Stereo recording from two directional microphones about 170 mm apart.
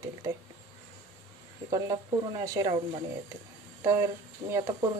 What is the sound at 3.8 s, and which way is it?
Speech, 15° right (ahead or behind).